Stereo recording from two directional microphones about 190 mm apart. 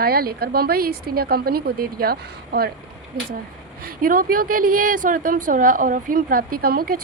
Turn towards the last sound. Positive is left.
turn(degrees=-50)  # may be behind; listen again after turning